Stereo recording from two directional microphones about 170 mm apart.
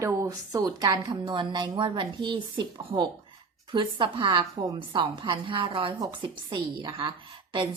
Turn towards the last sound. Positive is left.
turn(degrees=-30)  # may be behind; listen again after turning